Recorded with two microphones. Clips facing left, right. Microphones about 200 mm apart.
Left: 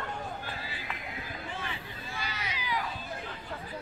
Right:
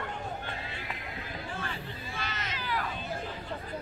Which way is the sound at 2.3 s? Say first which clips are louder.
Even; 10° left (ahead or behind).